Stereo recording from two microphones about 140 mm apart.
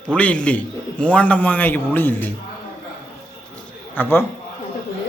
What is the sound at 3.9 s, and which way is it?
Speech, 15° left (ahead or behind).